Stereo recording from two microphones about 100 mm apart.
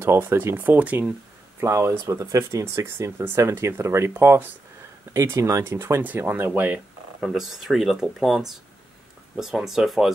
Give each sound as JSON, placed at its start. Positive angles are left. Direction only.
{"t": 0.0, "sound": "speech", "side_deg": -25}
{"t": 1.6, "sound": "speech", "side_deg": -25}
{"t": 7.2, "sound": "speech", "side_deg": -5}